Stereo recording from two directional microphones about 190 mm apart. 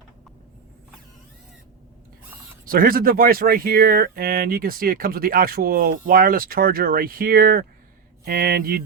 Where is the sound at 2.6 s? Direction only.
50° right (ahead or behind).